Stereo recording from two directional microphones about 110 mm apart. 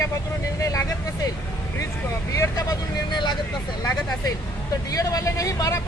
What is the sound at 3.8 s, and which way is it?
Speech, 35° left (ahead or behind).